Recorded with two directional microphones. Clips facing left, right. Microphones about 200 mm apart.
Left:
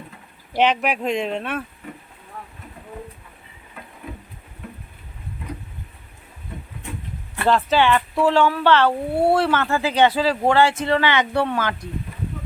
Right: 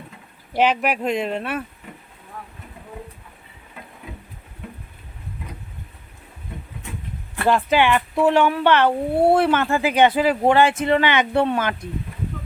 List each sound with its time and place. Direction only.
0.5 s speech: 5° right (ahead or behind)
7.4 s speech: 15° right (ahead or behind)